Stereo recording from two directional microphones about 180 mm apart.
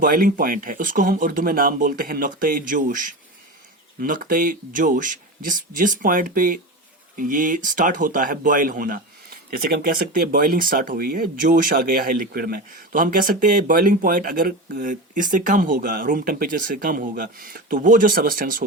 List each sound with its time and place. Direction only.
0.0 s speech: 50° right (ahead or behind)